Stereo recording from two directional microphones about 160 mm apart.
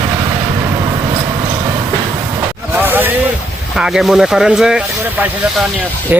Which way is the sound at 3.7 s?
5° right (ahead or behind).